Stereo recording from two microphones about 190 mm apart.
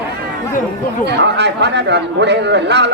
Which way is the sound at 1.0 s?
65° right (ahead or behind).